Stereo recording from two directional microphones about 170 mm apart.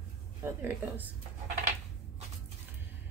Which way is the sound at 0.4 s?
10° right (ahead or behind).